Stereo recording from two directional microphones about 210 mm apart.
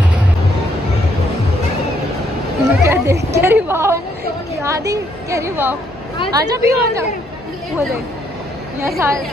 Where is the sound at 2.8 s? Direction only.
10° right (ahead or behind).